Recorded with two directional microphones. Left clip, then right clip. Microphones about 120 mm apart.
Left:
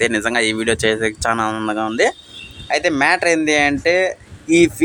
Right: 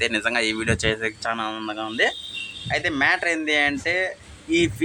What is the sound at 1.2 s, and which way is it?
Speech, 55° left (ahead or behind).